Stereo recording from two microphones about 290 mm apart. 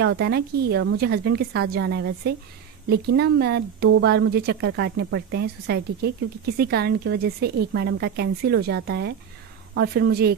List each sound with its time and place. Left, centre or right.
0.0 s speech: right